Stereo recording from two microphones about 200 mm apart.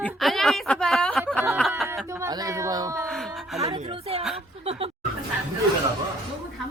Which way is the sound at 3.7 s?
25° right (ahead or behind).